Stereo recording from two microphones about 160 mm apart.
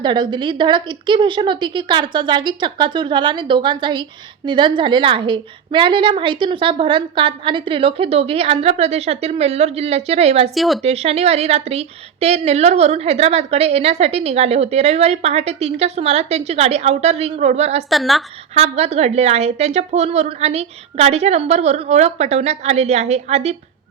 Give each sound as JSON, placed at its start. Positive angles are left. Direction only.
{"t": 0.0, "sound": "a woman's voice", "side_deg": -30}
{"t": 10.5, "sound": "a woman's voice", "side_deg": 0}
{"t": 10.8, "sound": "a woman's voice", "side_deg": -40}
{"t": 17.8, "sound": "a woman's voice", "side_deg": 0}
{"t": 18.5, "sound": "a woman's voice", "side_deg": -45}